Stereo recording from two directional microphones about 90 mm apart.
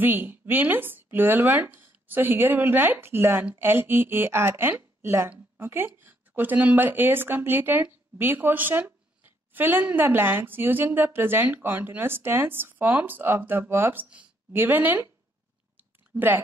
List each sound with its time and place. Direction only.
0.0 s a woman's voice: 20° right (ahead or behind)
16.1 s speech: 25° right (ahead or behind)